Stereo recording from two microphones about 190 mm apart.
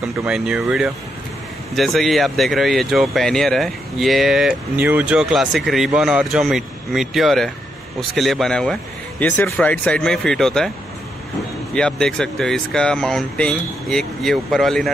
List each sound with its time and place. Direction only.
0.2 s speech: 5° right (ahead or behind)
11.7 s speech: 5° left (ahead or behind)